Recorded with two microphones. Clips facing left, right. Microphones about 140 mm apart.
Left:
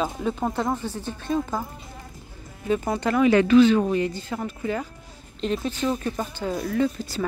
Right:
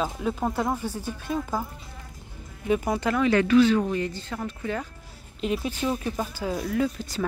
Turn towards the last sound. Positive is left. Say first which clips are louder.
# left 2 dB
turn(degrees=0)  # may be behind; listen again after turning